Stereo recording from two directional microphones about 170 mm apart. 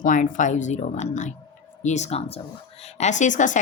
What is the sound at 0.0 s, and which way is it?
Speech, 50° left (ahead or behind).